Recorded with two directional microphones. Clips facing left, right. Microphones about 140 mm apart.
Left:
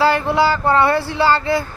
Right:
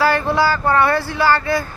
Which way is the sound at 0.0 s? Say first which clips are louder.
Left 1 dB; 20° left (ahead or behind).